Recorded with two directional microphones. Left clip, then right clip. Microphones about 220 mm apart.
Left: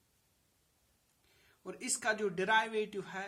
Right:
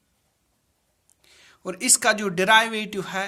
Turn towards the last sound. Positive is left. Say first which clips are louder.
# right 9 dB
turn(degrees=-35)  # may be behind; listen again after turning